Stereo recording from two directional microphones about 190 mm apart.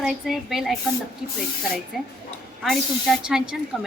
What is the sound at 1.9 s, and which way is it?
A woman's voice, centre (ahead or behind).